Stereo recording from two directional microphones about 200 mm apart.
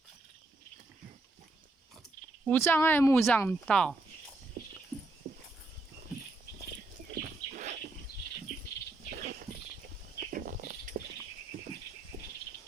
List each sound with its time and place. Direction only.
2.5 s speech: 10° left (ahead or behind)
5.2 s a sound: 30° right (ahead or behind)
7.1 s bird: 45° right (ahead or behind)
9.0 s bird: 40° right (ahead or behind)
10.2 s a sound: 45° right (ahead or behind)
11.5 s horse: 45° right (ahead or behind)